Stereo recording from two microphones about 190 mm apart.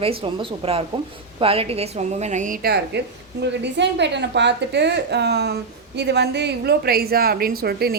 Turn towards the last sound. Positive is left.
turn(degrees=-55)  # may be behind; listen again after turning